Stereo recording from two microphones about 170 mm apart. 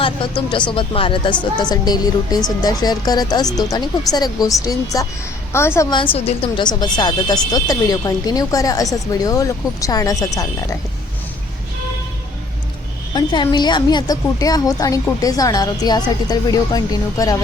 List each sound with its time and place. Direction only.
0.0 s a woman's voice: 30° left (ahead or behind)
6.1 s a woman's voice: 35° left (ahead or behind); by 10.8 s 20° left (ahead or behind)
13.1 s a woman's voice: 25° left (ahead or behind)